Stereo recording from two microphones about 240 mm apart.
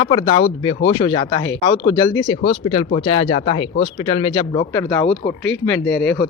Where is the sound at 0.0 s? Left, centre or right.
Left.